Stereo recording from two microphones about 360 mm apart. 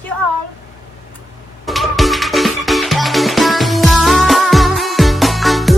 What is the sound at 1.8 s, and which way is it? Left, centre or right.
Music, centre.